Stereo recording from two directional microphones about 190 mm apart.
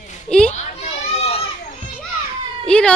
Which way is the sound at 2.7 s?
5° left (ahead or behind).